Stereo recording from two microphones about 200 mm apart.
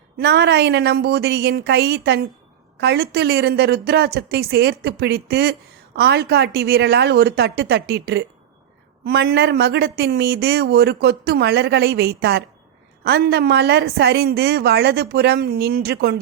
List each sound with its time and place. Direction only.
0.2 s a woman's voice: 55° right (ahead or behind)